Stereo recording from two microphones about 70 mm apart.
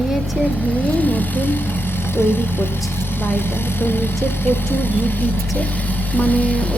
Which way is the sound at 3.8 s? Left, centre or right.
Left.